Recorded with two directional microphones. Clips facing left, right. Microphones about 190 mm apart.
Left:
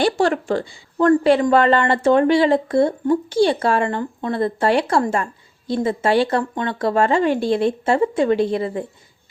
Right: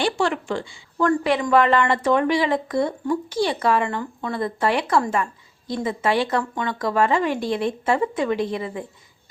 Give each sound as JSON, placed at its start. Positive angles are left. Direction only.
{"t": 0.0, "sound": "speech", "side_deg": 40}